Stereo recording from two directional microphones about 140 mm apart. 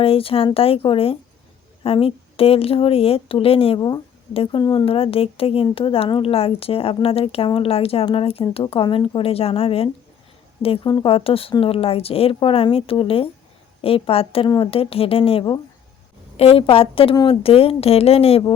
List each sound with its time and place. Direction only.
0.0 s a woman's voice: 40° left (ahead or behind)
3.8 s a woman's voice: 25° left (ahead or behind)
4.9 s a woman's voice: 40° left (ahead or behind)